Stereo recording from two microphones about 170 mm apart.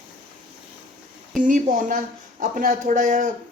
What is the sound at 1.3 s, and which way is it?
A man's voice, 50° right (ahead or behind).